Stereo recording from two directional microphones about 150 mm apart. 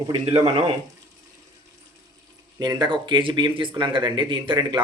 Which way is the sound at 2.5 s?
25° right (ahead or behind).